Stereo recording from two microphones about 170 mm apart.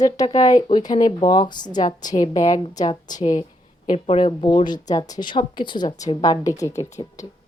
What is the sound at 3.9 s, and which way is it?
A woman's voice, 35° left (ahead or behind).